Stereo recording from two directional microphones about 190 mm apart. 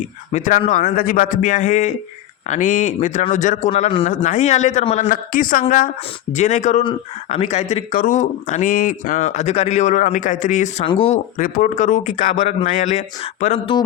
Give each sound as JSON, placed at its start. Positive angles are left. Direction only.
{"t": 0.3, "sound": "a man's voice", "side_deg": 40}
{"t": 10.8, "sound": "speech", "side_deg": 30}
{"t": 11.3, "sound": "speech", "side_deg": 45}